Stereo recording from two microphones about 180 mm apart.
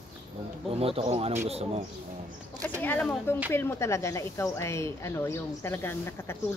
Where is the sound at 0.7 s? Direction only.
30° right (ahead or behind).